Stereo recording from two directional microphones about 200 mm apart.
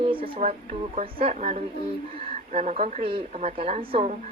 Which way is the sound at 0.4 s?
35° right (ahead or behind).